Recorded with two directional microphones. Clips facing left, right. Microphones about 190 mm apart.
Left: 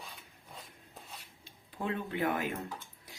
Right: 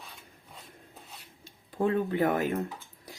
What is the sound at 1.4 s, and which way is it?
Speech, 45° right (ahead or behind).